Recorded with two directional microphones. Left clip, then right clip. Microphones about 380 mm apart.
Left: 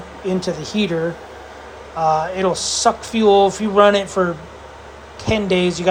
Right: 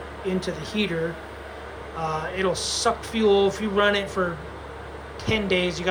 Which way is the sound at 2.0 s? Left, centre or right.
Centre.